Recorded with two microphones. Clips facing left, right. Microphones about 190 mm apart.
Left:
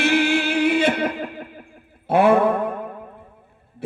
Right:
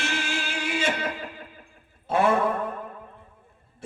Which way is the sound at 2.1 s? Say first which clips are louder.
Left 6 dB; 60° left (ahead or behind).